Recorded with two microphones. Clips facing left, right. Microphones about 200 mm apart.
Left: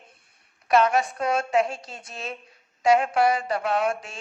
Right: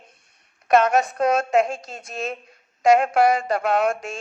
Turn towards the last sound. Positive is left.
turn(degrees=-45)  # may be behind; listen again after turning